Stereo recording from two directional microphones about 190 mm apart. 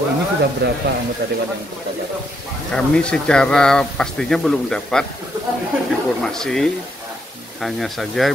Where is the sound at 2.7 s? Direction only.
5° left (ahead or behind).